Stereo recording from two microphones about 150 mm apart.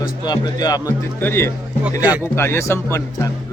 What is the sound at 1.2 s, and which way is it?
Speech, 15° left (ahead or behind).